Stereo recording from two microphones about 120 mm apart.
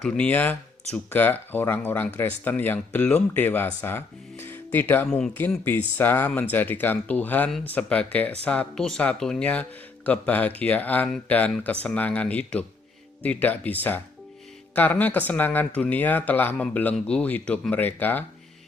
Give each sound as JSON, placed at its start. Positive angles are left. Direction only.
{"t": 0.0, "sound": "speech", "side_deg": 5}
{"t": 0.3, "sound": "speech", "side_deg": 15}